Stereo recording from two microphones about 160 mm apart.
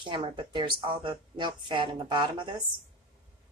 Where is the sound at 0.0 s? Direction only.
30° right (ahead or behind).